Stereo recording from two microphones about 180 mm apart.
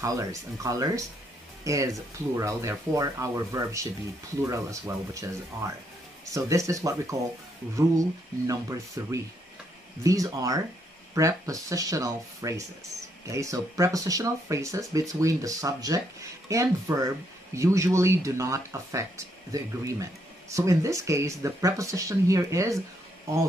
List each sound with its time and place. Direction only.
0.0 s speech: 20° right (ahead or behind)
8.5 s speech: 20° right (ahead or behind)